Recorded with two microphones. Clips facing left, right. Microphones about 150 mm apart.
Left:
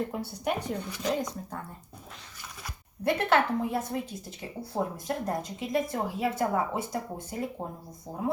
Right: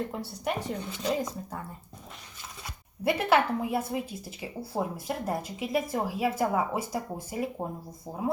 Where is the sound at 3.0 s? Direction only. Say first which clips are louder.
Right 1 dB; 5° right (ahead or behind).